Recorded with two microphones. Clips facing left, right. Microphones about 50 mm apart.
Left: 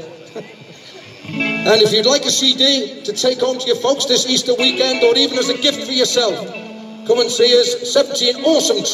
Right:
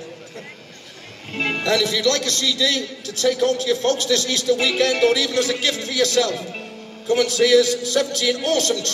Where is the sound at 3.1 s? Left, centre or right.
Left.